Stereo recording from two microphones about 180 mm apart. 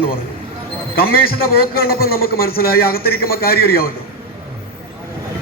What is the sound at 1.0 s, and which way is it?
A man's voice, 55° left (ahead or behind).